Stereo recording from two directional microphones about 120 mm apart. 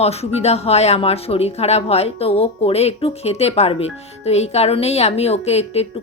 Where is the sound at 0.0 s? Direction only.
60° left (ahead or behind).